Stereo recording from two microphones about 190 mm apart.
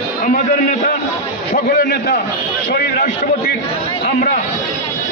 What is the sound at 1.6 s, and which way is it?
Speech, 55° left (ahead or behind).